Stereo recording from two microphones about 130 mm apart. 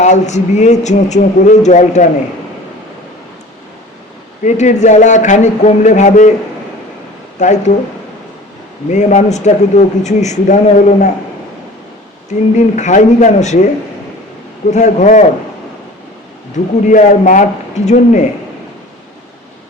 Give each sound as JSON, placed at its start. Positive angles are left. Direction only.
{"t": 0.0, "sound": "speech", "side_deg": 65}
{"t": 4.4, "sound": "a man's voice", "side_deg": 65}
{"t": 7.3, "sound": "speech", "side_deg": 70}
{"t": 8.9, "sound": "speech", "side_deg": 65}
{"t": 12.5, "sound": "speech", "side_deg": 65}
{"t": 14.7, "sound": "a man's voice", "side_deg": 65}
{"t": 16.8, "sound": "a man's voice", "side_deg": 75}